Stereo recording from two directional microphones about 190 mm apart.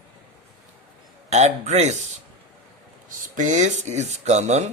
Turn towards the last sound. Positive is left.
turn(degrees=-35)  # may be behind; listen again after turning